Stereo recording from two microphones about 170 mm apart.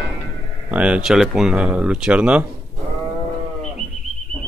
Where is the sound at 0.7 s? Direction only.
5° right (ahead or behind).